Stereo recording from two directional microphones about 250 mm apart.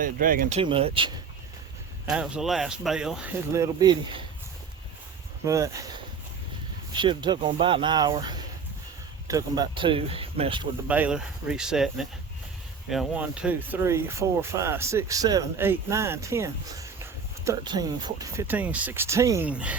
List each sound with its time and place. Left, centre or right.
0.0 s speech: right
0.6 s speech: right
2.0 s speech: centre
5.5 s speech: centre
6.9 s speech: centre
10.8 s speech: centre